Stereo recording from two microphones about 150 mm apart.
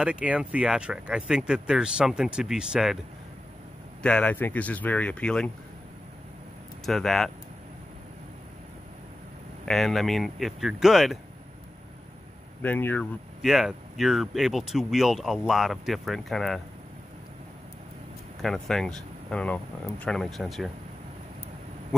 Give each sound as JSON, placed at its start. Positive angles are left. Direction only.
{"t": 0.0, "sound": "speech", "side_deg": -10}
{"t": 4.0, "sound": "speech", "side_deg": 10}
{"t": 6.9, "sound": "speech", "side_deg": 0}
{"t": 9.7, "sound": "speech", "side_deg": 0}
{"t": 12.6, "sound": "speech", "side_deg": 10}
{"t": 13.4, "sound": "speech", "side_deg": 0}
{"t": 18.4, "sound": "speech", "side_deg": 0}